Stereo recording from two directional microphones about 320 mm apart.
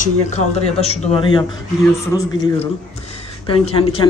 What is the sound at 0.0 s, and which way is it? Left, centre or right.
Speech, left.